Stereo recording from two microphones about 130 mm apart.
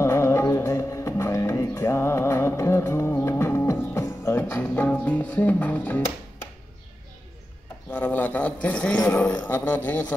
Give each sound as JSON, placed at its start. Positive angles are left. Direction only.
{"t": 0.0, "sound": "music", "side_deg": 20}
{"t": 7.9, "sound": "a man's voice", "side_deg": 15}